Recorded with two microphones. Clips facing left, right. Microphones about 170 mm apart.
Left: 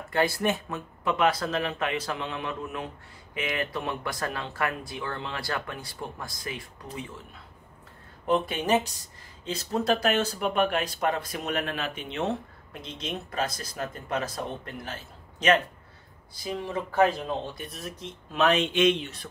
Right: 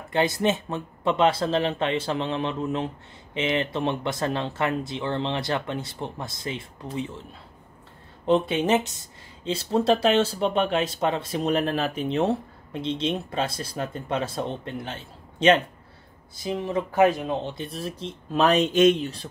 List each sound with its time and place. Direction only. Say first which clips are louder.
0.1 s speech: right 3 dB; 20° right (ahead or behind)
8.3 s speech: right 4 dB; 25° right (ahead or behind)